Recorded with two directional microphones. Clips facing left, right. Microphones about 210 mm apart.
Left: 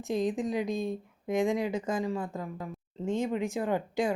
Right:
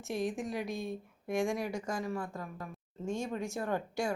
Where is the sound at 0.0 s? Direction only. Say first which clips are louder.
Left 5 dB; 20° left (ahead or behind).